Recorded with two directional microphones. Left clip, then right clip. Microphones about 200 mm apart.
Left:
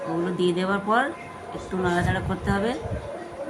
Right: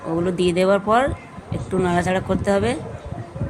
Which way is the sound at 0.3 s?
35° right (ahead or behind).